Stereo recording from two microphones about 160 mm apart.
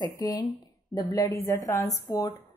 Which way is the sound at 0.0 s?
25° left (ahead or behind).